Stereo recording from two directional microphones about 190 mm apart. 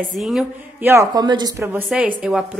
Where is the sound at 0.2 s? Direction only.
5° right (ahead or behind); by 1.5 s 20° right (ahead or behind).